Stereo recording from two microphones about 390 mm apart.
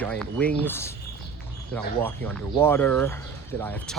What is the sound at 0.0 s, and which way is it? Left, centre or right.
Speech, centre.